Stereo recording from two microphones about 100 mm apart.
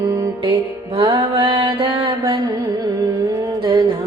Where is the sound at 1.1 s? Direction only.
55° right (ahead or behind).